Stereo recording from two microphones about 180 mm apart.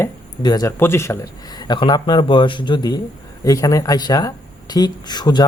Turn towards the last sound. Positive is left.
turn(degrees=25)  # may be behind; listen again after turning